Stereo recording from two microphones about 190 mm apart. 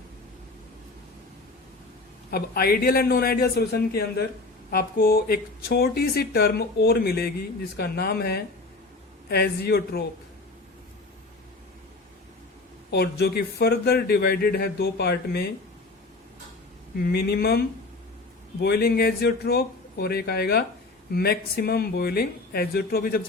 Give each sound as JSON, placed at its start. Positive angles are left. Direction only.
{"t": 2.3, "sound": "speech", "side_deg": 55}
{"t": 12.9, "sound": "speech", "side_deg": 60}
{"t": 17.0, "sound": "speech", "side_deg": 55}
{"t": 18.6, "sound": "speech", "side_deg": 55}